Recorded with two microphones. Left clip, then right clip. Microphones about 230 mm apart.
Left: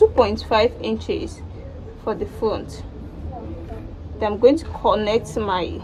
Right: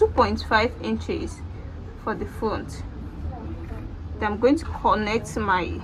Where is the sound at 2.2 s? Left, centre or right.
Right.